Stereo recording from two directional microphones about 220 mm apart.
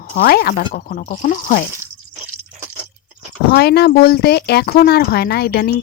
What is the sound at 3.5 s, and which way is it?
Speech, 45° left (ahead or behind).